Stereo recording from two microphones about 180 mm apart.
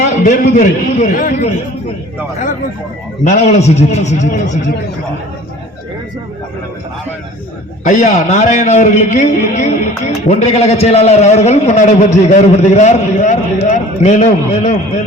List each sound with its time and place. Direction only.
0.0 s a man's voice: 45° left (ahead or behind)
3.2 s a man's voice: 35° left (ahead or behind)
7.9 s a man's voice: 45° left (ahead or behind)